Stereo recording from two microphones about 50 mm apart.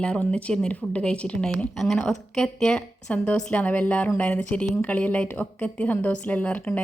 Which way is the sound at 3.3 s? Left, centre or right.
Left.